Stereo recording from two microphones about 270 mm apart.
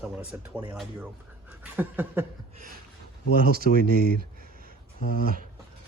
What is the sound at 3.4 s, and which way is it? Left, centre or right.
Speech, right.